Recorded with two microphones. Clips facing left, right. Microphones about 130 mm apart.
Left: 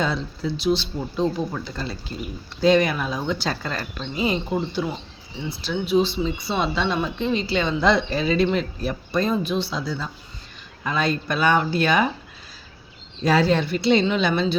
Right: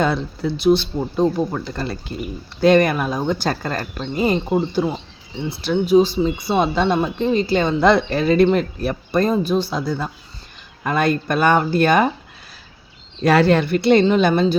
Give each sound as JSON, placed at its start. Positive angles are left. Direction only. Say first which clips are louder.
{"t": 0.0, "sound": "speech", "louder": "right 5 dB", "side_deg": -60}
{"t": 13.2, "sound": "speech", "louder": "right 4 dB", "side_deg": -65}